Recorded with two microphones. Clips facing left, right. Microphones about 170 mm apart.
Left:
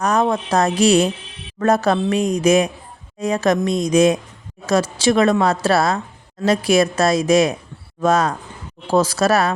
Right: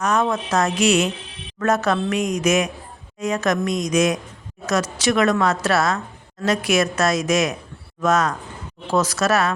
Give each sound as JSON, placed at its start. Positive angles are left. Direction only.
{"t": 0.0, "sound": "a woman's voice", "side_deg": 35}